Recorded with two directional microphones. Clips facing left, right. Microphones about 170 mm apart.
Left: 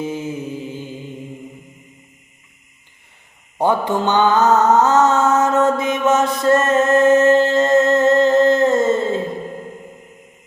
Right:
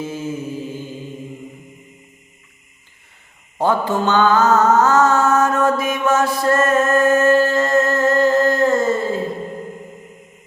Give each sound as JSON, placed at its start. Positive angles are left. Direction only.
{"t": 0.0, "sound": "mantra", "side_deg": 15}
{"t": 3.6, "sound": "mantra", "side_deg": 15}